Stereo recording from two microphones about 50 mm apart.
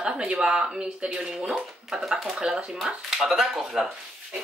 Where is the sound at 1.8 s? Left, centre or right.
Centre.